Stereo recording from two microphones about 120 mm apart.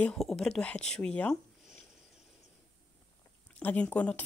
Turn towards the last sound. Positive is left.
turn(degrees=10)  # may be behind; listen again after turning